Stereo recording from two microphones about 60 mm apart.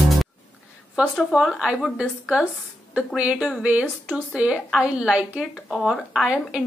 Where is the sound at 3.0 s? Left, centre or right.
Centre.